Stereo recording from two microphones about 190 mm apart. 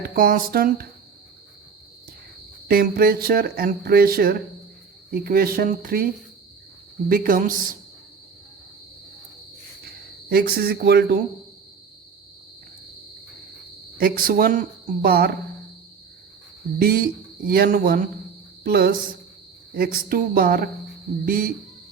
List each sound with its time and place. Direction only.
0.0 s speech: 45° right (ahead or behind)
2.6 s speech: 50° right (ahead or behind)
7.1 s speech: 45° right (ahead or behind)
9.8 s speech: 55° right (ahead or behind)
14.0 s speech: 50° right (ahead or behind)
16.7 s speech: 50° right (ahead or behind)